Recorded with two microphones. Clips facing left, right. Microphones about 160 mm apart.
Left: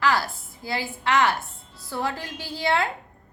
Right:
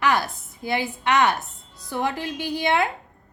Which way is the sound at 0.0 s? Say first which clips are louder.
Right 1 dB; 20° right (ahead or behind).